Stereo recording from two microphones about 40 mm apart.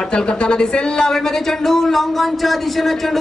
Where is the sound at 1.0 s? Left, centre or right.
Centre.